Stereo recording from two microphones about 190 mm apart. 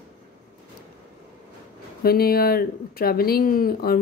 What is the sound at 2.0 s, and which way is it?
Speech, 55° left (ahead or behind).